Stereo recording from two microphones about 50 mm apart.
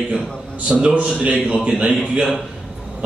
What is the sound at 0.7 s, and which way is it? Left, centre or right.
A man's voice, right.